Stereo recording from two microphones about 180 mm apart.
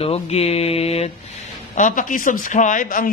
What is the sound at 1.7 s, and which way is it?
Speech, 45° left (ahead or behind).